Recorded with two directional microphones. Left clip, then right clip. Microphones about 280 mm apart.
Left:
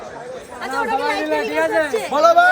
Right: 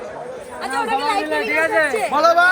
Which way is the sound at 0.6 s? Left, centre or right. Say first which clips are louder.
Even; centre.